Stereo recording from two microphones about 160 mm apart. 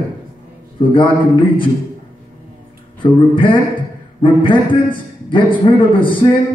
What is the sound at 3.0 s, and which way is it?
A man's voice, 30° left (ahead or behind).